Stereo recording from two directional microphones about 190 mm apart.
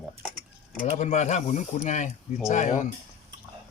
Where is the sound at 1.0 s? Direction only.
40° left (ahead or behind).